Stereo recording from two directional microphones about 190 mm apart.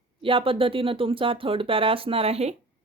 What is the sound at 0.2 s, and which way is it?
Speech, 30° right (ahead or behind).